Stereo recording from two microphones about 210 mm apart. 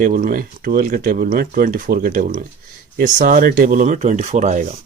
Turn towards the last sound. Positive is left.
turn(degrees=-35)  # may be behind; listen again after turning